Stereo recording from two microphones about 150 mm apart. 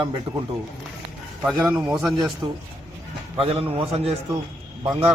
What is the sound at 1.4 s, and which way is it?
Speech, 5° right (ahead or behind).